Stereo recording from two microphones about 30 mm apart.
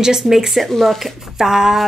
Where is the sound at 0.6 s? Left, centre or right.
Centre.